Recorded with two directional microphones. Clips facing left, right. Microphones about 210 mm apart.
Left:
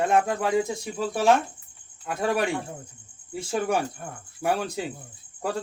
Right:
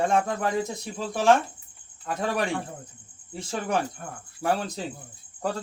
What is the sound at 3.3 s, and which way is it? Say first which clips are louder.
Speech: left 3 dB; 10° left (ahead or behind).